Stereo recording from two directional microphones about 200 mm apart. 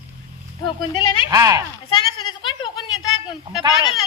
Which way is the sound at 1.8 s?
20° left (ahead or behind).